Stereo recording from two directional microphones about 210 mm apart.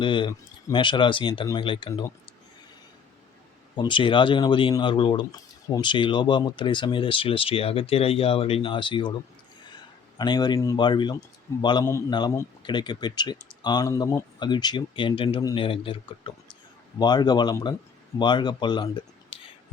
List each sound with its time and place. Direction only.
0.0 s speech: 25° left (ahead or behind)
3.8 s speech: 25° left (ahead or behind)